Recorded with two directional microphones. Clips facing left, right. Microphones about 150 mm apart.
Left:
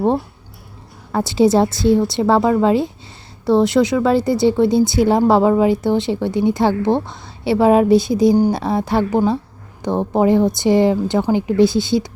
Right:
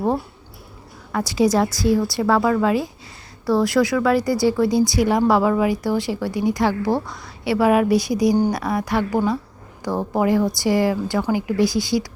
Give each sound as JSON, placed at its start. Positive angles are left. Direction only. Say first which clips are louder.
{"t": 1.1, "sound": "speech", "louder": "left 4 dB", "side_deg": 25}